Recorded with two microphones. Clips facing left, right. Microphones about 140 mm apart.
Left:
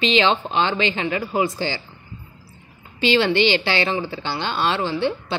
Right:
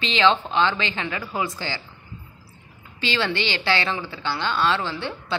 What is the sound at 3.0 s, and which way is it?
A woman's voice, 20° left (ahead or behind).